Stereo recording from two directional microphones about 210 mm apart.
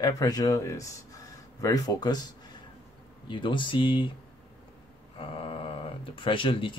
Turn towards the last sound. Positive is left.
turn(degrees=25)  # may be behind; listen again after turning